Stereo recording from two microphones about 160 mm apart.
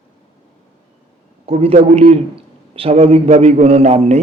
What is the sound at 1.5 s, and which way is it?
A man's voice, 40° right (ahead or behind).